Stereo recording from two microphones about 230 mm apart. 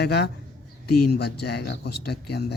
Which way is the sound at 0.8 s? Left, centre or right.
Left.